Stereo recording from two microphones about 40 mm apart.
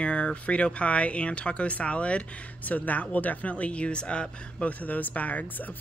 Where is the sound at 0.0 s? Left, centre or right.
Left.